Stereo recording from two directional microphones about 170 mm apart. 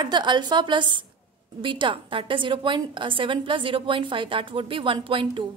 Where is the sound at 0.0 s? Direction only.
25° right (ahead or behind).